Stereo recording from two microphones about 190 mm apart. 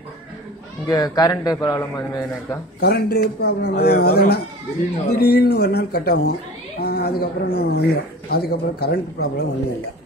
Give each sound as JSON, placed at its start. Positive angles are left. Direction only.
{"t": 0.8, "sound": "a man's voice", "side_deg": 20}
{"t": 2.8, "sound": "speech", "side_deg": 55}